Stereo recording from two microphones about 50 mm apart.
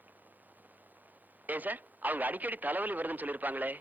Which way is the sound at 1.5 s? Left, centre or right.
Right.